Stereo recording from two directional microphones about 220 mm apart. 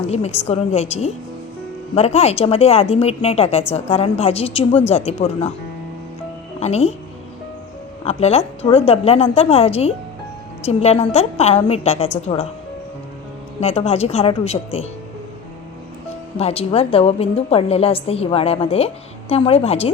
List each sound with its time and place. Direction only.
0.1 s a woman's voice: 30° left (ahead or behind)
6.6 s a woman's voice: 30° left (ahead or behind)
8.0 s a woman's voice: 30° left (ahead or behind)
13.6 s a woman's voice: 30° left (ahead or behind)
16.4 s a woman's voice: 25° left (ahead or behind)